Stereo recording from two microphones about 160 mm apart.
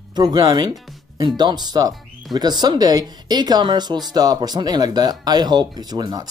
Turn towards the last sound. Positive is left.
turn(degrees=-25)  # may be behind; listen again after turning